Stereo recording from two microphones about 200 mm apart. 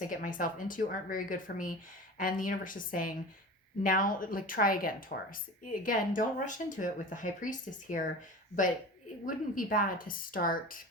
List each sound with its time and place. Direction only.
0.1 s speech: 45° left (ahead or behind)
9.2 s speech: 45° left (ahead or behind)